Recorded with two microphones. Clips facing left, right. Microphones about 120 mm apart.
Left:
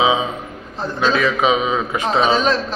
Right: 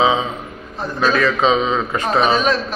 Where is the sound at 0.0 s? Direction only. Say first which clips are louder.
Right 1 dB; 10° left (ahead or behind).